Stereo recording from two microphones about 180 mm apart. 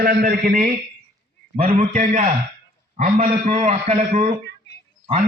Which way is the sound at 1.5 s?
35° right (ahead or behind).